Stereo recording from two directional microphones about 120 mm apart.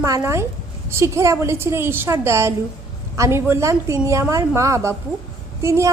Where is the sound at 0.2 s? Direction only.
20° right (ahead or behind).